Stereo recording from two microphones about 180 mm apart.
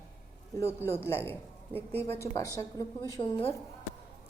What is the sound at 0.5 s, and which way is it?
A man's voice, 15° left (ahead or behind).